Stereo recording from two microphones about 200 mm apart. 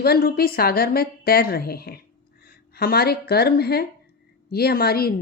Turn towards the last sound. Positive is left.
turn(degrees=50)  # may be behind; listen again after turning